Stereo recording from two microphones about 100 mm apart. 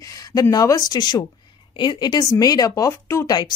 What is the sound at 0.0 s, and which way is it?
Speech, 35° left (ahead or behind).